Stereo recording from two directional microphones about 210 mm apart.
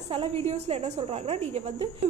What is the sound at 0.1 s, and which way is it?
A woman's voice, 25° right (ahead or behind).